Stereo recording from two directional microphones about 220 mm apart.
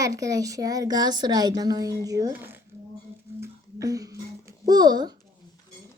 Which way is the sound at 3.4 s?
15° right (ahead or behind).